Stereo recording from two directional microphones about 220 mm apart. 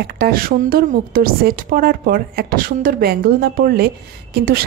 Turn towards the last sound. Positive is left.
turn(degrees=-45)  # may be behind; listen again after turning